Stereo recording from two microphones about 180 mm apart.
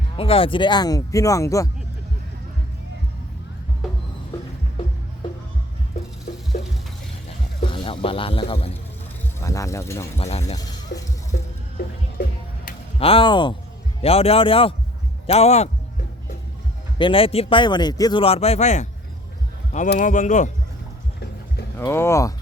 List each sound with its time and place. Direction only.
0.2 s speech: 30° left (ahead or behind)
6.5 s a sound: 55° left (ahead or behind)
7.7 s speech: 30° left (ahead or behind)
9.4 s speech: 15° left (ahead or behind)
10.2 s speech: 35° left (ahead or behind)
11.3 s music: 60° left (ahead or behind)
13.0 s speech: 30° left (ahead or behind)
17.0 s speech: 30° left (ahead or behind)
20.0 s speech: 45° left (ahead or behind)
21.8 s speech: 15° left (ahead or behind)